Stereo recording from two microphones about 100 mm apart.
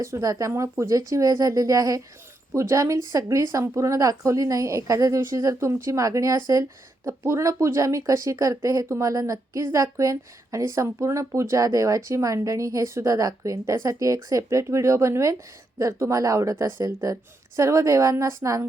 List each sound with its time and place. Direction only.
0.0 s speech: 30° right (ahead or behind)